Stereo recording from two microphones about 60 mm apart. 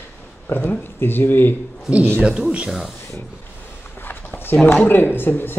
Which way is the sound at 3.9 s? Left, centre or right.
Left.